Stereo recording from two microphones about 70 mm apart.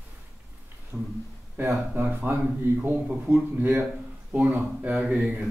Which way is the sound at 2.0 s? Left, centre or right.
Right.